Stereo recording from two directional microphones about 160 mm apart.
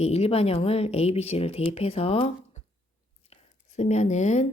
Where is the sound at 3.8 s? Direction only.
45° left (ahead or behind).